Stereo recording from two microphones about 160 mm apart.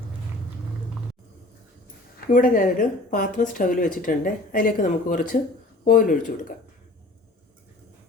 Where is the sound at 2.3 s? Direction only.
55° left (ahead or behind).